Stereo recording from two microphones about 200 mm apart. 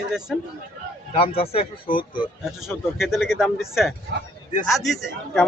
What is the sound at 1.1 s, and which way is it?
Speech, 30° left (ahead or behind).